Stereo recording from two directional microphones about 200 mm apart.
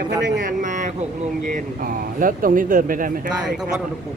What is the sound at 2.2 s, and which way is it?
Speech, 45° right (ahead or behind).